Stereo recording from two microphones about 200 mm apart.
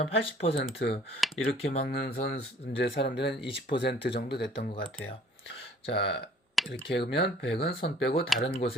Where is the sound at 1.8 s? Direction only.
50° left (ahead or behind).